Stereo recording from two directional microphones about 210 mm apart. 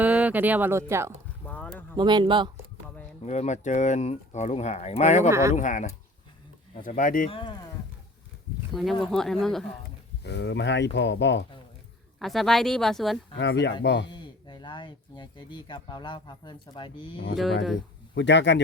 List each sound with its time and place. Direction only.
0.0 s speech: 5° right (ahead or behind)
1.5 s a sound: 5° left (ahead or behind)
2.0 s speech: 20° right (ahead or behind)
3.2 s speech: 35° left (ahead or behind)
5.3 s speech: 15° right (ahead or behind)
5.5 s speech: 35° left (ahead or behind)
7.3 s speech: 25° left (ahead or behind)
8.7 s speech: centre (ahead or behind)
10.2 s speech: 55° left (ahead or behind)
12.2 s speech: centre (ahead or behind)
13.3 s speech: 60° left (ahead or behind)
14.1 s speech: 20° left (ahead or behind)
18.1 s speech: 60° left (ahead or behind)